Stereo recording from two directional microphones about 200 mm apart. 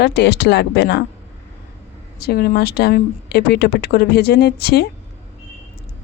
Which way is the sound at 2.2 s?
50° left (ahead or behind).